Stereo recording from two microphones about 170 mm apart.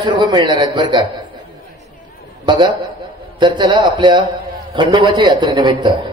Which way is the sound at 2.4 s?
25° right (ahead or behind).